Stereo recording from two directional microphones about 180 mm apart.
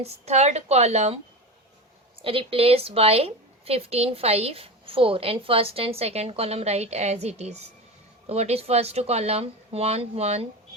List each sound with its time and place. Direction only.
0.0 s a woman's voice: 35° right (ahead or behind)